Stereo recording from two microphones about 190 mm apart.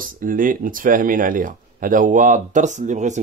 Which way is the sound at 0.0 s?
45° right (ahead or behind).